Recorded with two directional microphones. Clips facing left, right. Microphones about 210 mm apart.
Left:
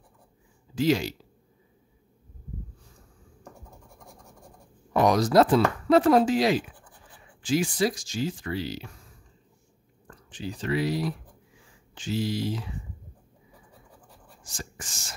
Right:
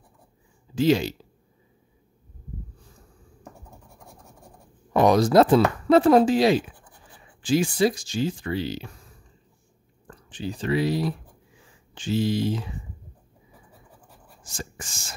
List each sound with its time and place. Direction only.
0.7 s speech: 25° right (ahead or behind)
4.9 s speech: 25° right (ahead or behind)
10.0 s speech: 30° right (ahead or behind)
14.5 s speech: 25° right (ahead or behind)